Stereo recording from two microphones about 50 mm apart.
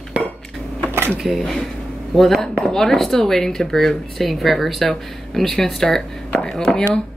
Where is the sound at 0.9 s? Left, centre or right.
Right.